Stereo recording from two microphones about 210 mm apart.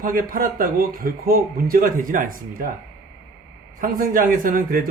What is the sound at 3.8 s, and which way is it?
A man's voice, 40° right (ahead or behind).